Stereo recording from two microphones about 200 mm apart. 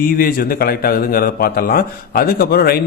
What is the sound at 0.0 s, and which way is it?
A man's voice, 45° left (ahead or behind).